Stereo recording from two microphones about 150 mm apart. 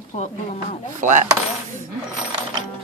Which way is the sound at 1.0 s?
55° right (ahead or behind).